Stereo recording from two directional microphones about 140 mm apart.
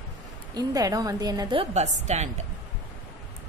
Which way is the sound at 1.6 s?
55° right (ahead or behind).